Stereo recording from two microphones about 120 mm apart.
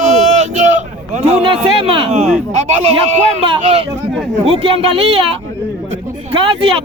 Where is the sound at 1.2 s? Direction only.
55° right (ahead or behind).